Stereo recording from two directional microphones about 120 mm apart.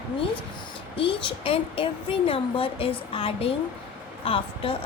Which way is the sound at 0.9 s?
50° left (ahead or behind).